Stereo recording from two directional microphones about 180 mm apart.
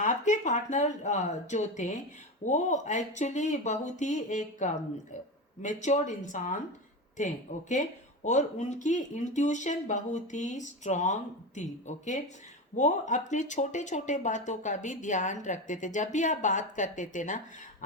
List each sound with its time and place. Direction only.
0.0 s speech: 45° left (ahead or behind)